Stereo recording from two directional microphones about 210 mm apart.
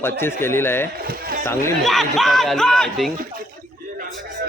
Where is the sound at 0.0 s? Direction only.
10° left (ahead or behind).